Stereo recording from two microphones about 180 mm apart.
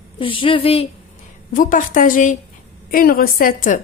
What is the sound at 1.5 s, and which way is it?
A woman's voice, 45° left (ahead or behind).